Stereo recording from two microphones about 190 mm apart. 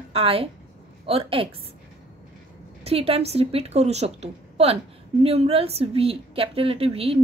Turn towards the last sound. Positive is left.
turn(degrees=-30)  # may be behind; listen again after turning